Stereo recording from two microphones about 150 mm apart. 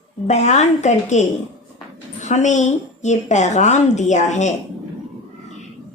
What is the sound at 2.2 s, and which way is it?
A woman's voice, 50° left (ahead or behind).